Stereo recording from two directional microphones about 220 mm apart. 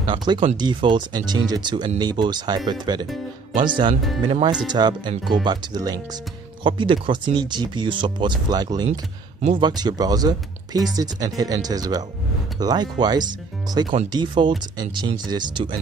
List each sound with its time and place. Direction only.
0.0 s speech: 20° right (ahead or behind)